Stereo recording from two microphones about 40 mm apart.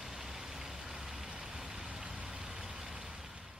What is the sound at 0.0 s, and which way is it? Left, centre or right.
Vehicle, centre.